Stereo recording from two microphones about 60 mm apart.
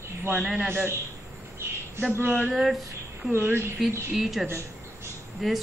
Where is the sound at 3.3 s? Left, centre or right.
Right.